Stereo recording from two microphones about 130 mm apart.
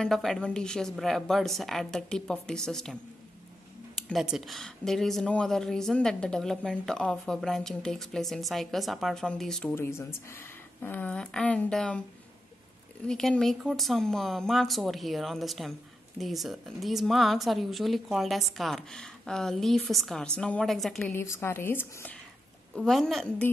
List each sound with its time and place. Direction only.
0.0 s speech: centre (ahead or behind)
4.1 s speech: centre (ahead or behind)
9.7 s speech: 20° left (ahead or behind)
13.0 s speech: 5° left (ahead or behind)
21.0 s speech: 20° left (ahead or behind)
22.8 s speech: centre (ahead or behind)